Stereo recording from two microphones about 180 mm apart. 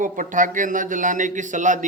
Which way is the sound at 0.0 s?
45° right (ahead or behind).